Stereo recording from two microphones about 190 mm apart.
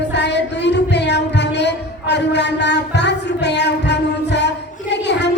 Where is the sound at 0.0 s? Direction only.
65° left (ahead or behind).